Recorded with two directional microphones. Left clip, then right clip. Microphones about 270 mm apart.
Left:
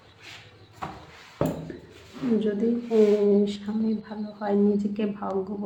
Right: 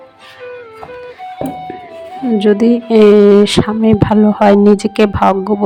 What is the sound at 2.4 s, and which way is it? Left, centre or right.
A woman's voice, right.